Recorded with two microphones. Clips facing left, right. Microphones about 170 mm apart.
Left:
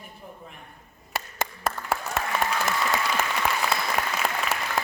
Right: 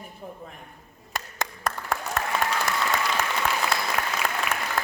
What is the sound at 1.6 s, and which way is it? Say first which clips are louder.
Applause: even; 5° left (ahead or behind).